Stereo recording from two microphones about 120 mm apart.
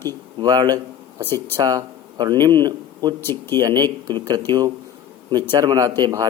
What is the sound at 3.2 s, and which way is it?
Speech, 20° left (ahead or behind).